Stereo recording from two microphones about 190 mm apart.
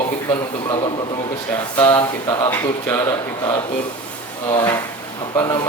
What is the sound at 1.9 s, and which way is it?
A man's voice, 15° left (ahead or behind).